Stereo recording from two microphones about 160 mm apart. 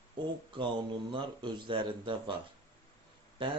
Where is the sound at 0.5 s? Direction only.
30° right (ahead or behind).